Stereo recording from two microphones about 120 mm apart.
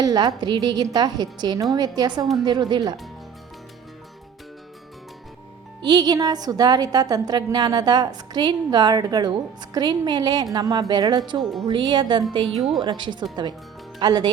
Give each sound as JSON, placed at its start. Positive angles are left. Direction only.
{"t": 0.0, "sound": "a woman's voice", "side_deg": -35}
{"t": 5.8, "sound": "a woman's voice", "side_deg": -35}
{"t": 12.5, "sound": "speech", "side_deg": 0}
{"t": 12.8, "sound": "a woman's voice", "side_deg": -40}